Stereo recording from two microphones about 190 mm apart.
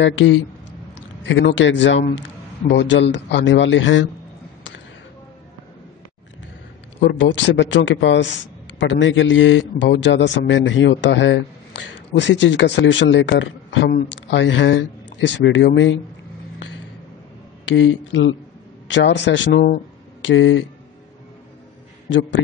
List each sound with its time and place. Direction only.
0.0 s a man's voice: 80° left
7.0 s a man's voice: 70° left (ahead or behind)
17.6 s a man's voice: 80° left
18.9 s a man's voice: 70° left (ahead or behind)
20.2 s speech: 80° left